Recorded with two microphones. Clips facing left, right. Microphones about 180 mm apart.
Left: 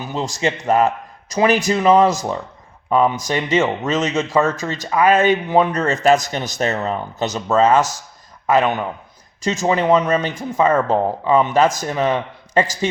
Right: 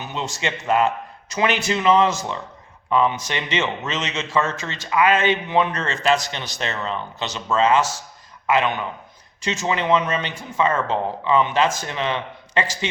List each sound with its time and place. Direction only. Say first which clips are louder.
0.0 s speech: left 6 dB; 35° left (ahead or behind)